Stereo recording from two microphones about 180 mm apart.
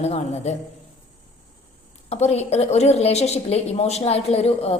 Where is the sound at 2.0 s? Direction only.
35° left (ahead or behind).